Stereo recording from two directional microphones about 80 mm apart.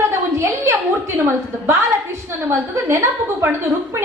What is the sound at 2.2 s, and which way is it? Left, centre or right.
A woman's voice, right.